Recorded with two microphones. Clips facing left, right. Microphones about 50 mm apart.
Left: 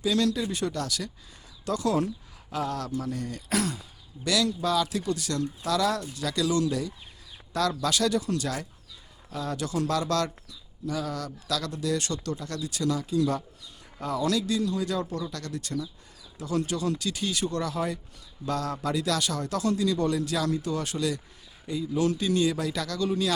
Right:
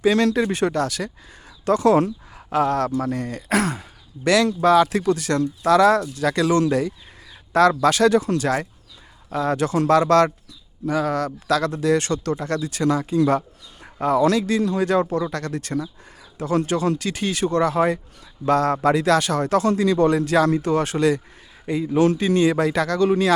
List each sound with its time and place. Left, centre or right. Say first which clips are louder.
0.0 s speech: right 8 dB; right